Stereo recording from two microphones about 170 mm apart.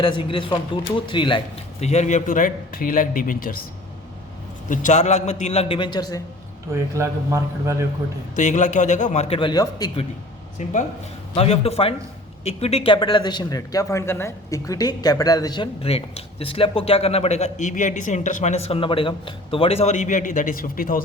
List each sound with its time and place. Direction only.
0.0 s speech: 30° left (ahead or behind)
1.8 s a man's voice: 40° left (ahead or behind)
4.7 s a man's voice: 45° left (ahead or behind); by 6.2 s 20° left (ahead or behind)
6.7 s a man's voice: 15° right (ahead or behind)
8.4 s a man's voice: 45° left (ahead or behind); by 10.0 s 25° left (ahead or behind)
10.6 s a man's voice: 45° left (ahead or behind)
11.3 s a man's voice: 35° left (ahead or behind); by 21.0 s 55° left (ahead or behind)